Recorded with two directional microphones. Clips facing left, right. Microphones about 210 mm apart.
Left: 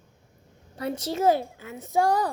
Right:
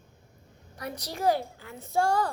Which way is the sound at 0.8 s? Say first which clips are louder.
Left 7 dB; 25° left (ahead or behind).